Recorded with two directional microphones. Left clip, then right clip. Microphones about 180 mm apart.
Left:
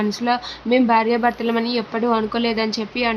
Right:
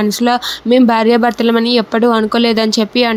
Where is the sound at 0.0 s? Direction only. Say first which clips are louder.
Right 7 dB; 40° right (ahead or behind).